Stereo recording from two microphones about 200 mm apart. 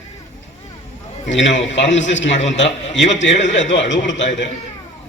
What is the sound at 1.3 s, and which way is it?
A man's voice, 65° left (ahead or behind).